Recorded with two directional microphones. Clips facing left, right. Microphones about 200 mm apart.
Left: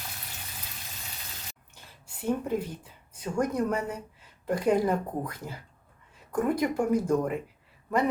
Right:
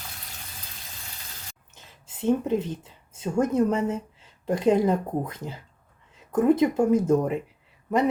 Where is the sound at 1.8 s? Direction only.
20° right (ahead or behind).